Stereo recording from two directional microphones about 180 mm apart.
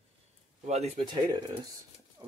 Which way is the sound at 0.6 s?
35° right (ahead or behind).